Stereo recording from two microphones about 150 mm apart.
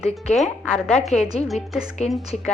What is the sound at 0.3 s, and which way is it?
Speech, centre (ahead or behind).